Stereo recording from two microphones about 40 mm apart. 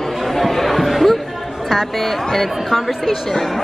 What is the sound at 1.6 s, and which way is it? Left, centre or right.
Speech, centre.